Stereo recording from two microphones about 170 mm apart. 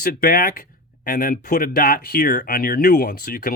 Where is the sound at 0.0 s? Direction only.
60° left (ahead or behind).